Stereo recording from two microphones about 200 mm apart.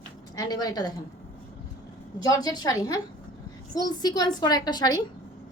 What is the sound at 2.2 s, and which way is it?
A woman's voice, 20° left (ahead or behind).